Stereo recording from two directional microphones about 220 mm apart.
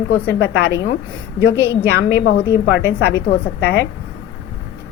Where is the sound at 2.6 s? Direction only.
50° left (ahead or behind).